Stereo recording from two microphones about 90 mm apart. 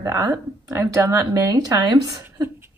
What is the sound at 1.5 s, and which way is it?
Speech, 45° right (ahead or behind).